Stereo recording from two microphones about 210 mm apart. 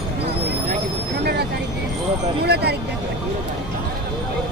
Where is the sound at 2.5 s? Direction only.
50° right (ahead or behind).